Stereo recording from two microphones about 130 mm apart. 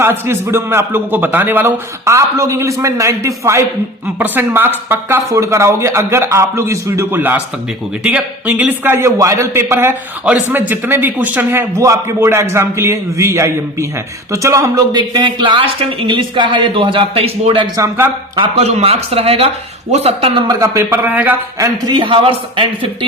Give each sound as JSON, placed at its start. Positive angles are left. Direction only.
{"t": 0.0, "sound": "a man's voice", "side_deg": -20}
{"t": 14.9, "sound": "speech", "side_deg": -35}
{"t": 17.7, "sound": "a man's voice", "side_deg": -20}
{"t": 18.3, "sound": "speech", "side_deg": -55}
{"t": 20.3, "sound": "speech", "side_deg": -25}
{"t": 21.6, "sound": "speech", "side_deg": -35}